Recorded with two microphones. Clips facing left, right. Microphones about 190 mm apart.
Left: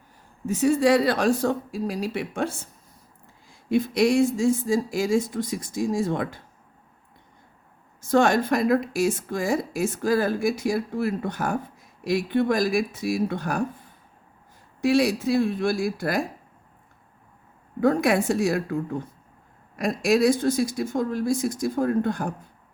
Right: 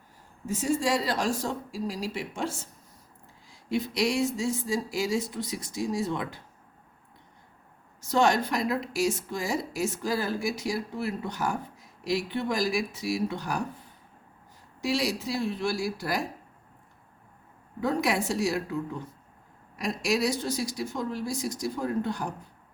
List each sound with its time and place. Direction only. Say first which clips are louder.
0.4 s speech: left 7 dB; 65° left (ahead or behind); by 6.4 s 50° left (ahead or behind)
8.0 s speech: left 4 dB; 55° left (ahead or behind)
14.8 s speech: left 8 dB; 55° left (ahead or behind)
17.7 s speech: left 6 dB; 50° left (ahead or behind)